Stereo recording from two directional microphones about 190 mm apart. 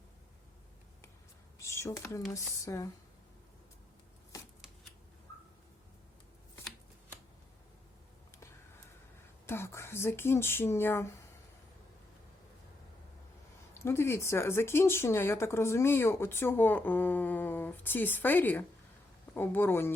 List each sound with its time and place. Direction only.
1.5 s a sound: 15° left (ahead or behind)
2.3 s speech: 15° left (ahead or behind)
9.5 s speech: 15° left (ahead or behind)
13.7 s speech: 15° left (ahead or behind)